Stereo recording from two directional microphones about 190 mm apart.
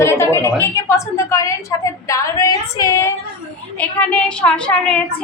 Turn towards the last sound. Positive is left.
turn(degrees=5)  # may be behind; listen again after turning